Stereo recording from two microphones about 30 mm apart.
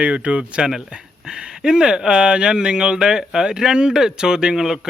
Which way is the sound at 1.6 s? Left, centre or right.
Right.